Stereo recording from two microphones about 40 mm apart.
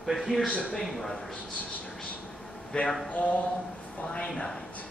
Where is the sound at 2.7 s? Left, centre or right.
Left.